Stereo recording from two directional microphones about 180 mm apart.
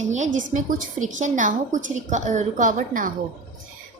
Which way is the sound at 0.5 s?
45° right (ahead or behind).